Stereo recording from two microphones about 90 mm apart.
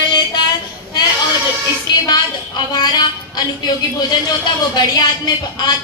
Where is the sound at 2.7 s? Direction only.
50° left (ahead or behind).